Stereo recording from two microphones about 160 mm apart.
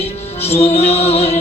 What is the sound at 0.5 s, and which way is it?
Music, 40° left (ahead or behind).